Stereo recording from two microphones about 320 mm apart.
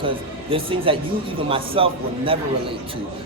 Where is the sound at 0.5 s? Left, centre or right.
Centre.